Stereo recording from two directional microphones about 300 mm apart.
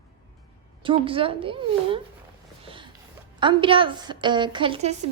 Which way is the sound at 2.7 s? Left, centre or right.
Centre.